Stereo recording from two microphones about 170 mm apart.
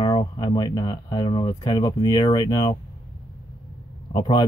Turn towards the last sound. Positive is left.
turn(degrees=25)  # may be behind; listen again after turning